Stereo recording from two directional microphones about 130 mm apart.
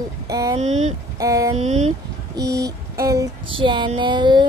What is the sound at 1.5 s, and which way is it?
Speech, 60° right (ahead or behind).